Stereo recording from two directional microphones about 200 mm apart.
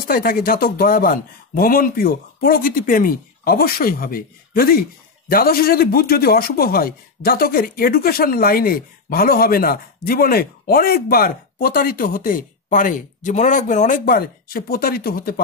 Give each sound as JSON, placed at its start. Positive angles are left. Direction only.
{"t": 0.0, "sound": "speech", "side_deg": 45}